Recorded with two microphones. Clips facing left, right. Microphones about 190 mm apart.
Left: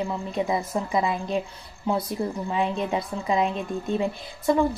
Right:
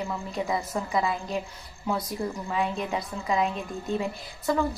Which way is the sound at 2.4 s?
25° left (ahead or behind).